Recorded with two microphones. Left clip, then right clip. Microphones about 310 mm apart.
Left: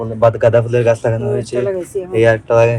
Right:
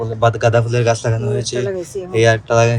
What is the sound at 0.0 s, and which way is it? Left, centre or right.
Speech, centre.